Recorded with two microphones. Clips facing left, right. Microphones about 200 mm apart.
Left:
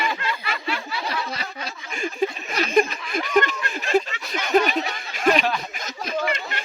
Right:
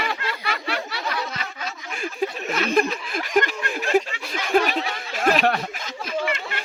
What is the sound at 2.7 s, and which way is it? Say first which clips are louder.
Snicker: left 4 dB; 5° right (ahead or behind).